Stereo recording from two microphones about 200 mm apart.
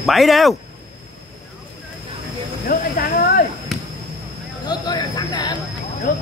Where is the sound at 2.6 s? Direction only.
50° left (ahead or behind).